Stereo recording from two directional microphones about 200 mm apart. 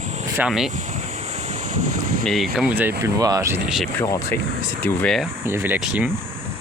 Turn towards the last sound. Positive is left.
turn(degrees=-10)  # may be behind; listen again after turning